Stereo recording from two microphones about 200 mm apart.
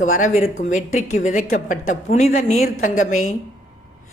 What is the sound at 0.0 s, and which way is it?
A woman's voice, 40° left (ahead or behind).